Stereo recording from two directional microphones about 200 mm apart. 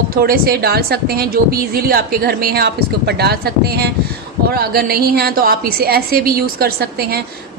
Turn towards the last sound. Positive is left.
turn(degrees=-50)  # may be behind; listen again after turning